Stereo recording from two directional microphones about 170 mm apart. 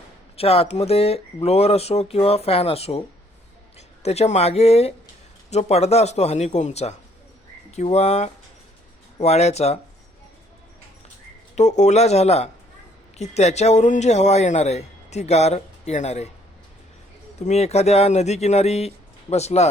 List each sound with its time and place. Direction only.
0.3 s speech: 35° left (ahead or behind)
11.5 s speech: 45° left (ahead or behind)
17.4 s speech: 40° left (ahead or behind)